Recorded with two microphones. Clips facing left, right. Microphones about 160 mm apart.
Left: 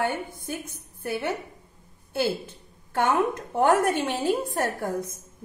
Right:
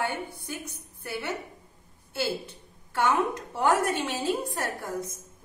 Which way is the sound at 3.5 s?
55° left (ahead or behind).